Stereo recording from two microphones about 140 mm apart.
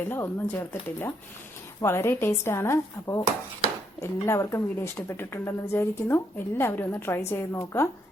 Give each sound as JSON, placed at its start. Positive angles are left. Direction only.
{"t": 0.0, "sound": "a woman's voice", "side_deg": 15}